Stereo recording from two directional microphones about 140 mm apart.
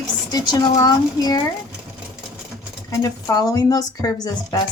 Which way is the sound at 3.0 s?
25° left (ahead or behind).